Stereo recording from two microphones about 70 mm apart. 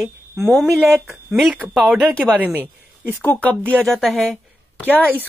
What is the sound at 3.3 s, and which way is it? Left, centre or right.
Speech, left.